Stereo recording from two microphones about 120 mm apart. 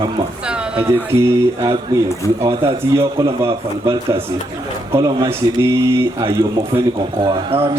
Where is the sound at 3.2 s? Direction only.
45° right (ahead or behind).